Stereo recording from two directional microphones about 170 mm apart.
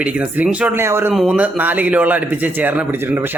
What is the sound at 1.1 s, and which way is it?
A man's voice, 5° right (ahead or behind).